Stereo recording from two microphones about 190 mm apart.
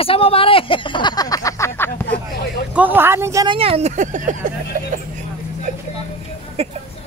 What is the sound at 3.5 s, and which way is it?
Speech, 30° right (ahead or behind).